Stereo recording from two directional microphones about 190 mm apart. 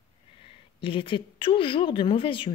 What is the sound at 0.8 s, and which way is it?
A woman's voice, 25° left (ahead or behind).